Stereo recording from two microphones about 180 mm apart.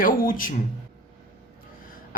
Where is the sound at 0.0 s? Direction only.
50° left (ahead or behind).